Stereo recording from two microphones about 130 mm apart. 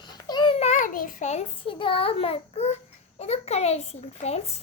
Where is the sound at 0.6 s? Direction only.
75° left (ahead or behind); by 1.7 s 60° left (ahead or behind).